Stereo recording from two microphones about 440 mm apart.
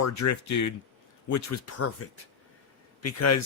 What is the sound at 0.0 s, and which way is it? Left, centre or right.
Speech, left.